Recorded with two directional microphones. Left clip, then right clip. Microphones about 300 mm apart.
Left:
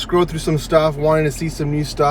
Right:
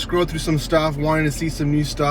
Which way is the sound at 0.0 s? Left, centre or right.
Centre.